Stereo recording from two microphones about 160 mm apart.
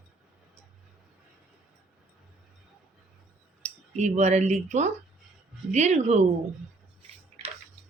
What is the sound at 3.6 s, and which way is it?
Speech, 45° right (ahead or behind).